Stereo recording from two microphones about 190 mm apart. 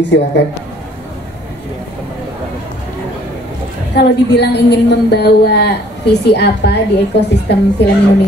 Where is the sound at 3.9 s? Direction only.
60° left (ahead or behind).